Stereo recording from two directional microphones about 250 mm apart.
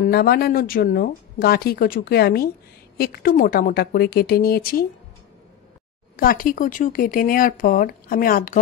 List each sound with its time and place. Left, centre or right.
0.0 s a woman's voice: left
6.1 s a woman's voice: left